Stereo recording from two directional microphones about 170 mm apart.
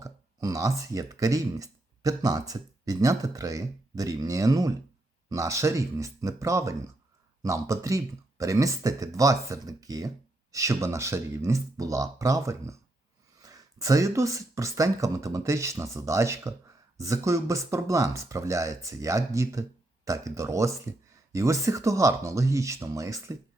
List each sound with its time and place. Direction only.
0.0 s speech: 20° right (ahead or behind)